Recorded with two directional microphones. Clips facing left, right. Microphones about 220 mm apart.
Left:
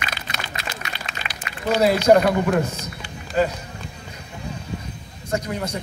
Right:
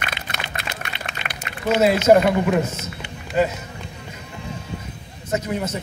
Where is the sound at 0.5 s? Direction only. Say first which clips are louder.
Right 1 dB; 60° right (ahead or behind).